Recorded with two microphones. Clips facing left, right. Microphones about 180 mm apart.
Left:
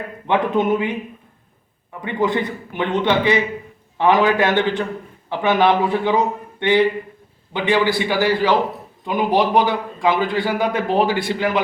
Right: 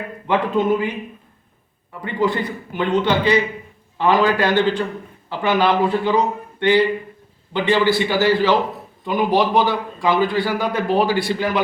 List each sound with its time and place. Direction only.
0.3 s a man's voice: 20° left (ahead or behind)
2.1 s a man's voice: 20° left (ahead or behind)